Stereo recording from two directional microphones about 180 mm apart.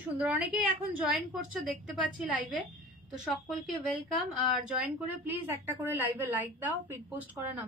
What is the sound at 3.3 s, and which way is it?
Speech, centre (ahead or behind).